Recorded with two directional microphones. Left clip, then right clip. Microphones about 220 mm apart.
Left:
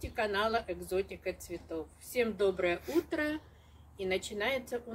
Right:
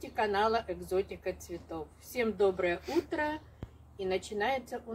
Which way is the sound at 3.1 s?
15° left (ahead or behind).